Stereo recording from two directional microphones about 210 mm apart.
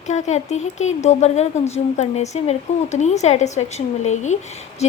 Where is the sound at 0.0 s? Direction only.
35° left (ahead or behind).